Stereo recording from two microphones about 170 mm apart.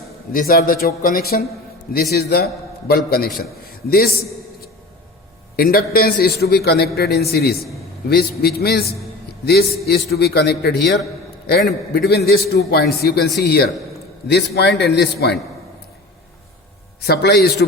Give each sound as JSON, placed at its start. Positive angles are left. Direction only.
{"t": 0.3, "sound": "a man's voice", "side_deg": 60}
{"t": 5.5, "sound": "a man's voice", "side_deg": 60}
{"t": 11.4, "sound": "a man's voice", "side_deg": 65}
{"t": 17.0, "sound": "a man's voice", "side_deg": 70}